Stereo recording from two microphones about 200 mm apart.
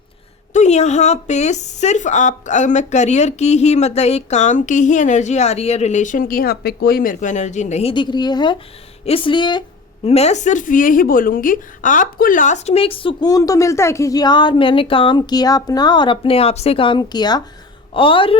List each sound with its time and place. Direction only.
0.5 s a woman's voice: 35° left (ahead or behind)